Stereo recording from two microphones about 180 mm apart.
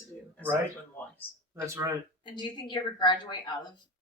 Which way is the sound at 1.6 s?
15° right (ahead or behind).